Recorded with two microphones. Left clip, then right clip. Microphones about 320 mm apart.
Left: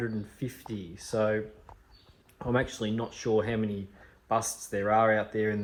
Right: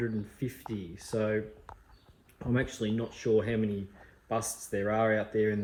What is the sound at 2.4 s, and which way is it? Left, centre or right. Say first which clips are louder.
Speech: left 3 dB; centre.